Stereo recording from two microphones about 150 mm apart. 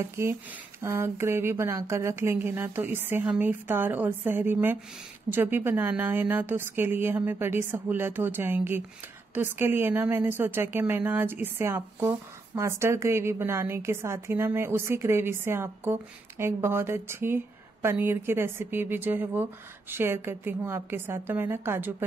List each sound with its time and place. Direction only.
0.0 s a woman's voice: 20° right (ahead or behind)